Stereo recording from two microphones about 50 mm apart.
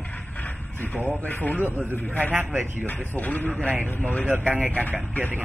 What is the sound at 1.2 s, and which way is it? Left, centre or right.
Speech, left.